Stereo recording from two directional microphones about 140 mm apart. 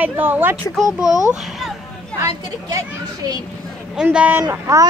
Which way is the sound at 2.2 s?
25° right (ahead or behind).